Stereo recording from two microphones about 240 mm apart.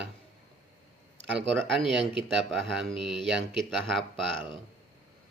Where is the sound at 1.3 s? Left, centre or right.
Right.